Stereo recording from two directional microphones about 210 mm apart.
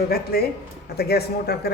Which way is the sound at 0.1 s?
45° left (ahead or behind).